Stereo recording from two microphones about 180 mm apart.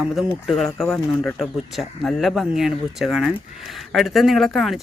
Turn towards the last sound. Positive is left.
turn(degrees=0)  # may be behind; listen again after turning